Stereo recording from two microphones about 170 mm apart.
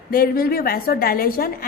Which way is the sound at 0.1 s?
60° left (ahead or behind).